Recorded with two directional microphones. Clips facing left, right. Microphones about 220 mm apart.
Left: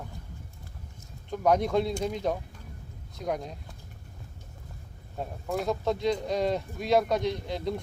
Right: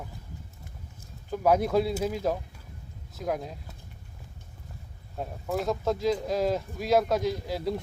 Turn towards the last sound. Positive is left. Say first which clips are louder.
# right 1 dB
turn(degrees=-5)  # may be behind; listen again after turning